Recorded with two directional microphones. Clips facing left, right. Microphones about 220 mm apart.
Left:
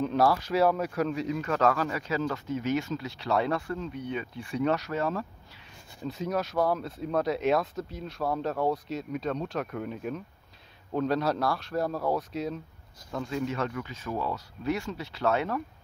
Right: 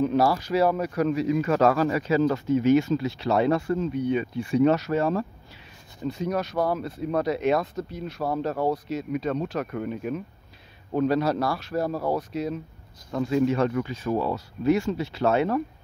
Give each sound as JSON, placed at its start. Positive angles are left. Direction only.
{"t": 0.0, "sound": "speech", "side_deg": -5}
{"t": 1.7, "sound": "speech", "side_deg": -30}
{"t": 4.6, "sound": "speech", "side_deg": -30}
{"t": 6.0, "sound": "speech", "side_deg": 0}
{"t": 13.6, "sound": "speech", "side_deg": -30}